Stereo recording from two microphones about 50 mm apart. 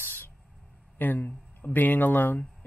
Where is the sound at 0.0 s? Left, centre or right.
Left.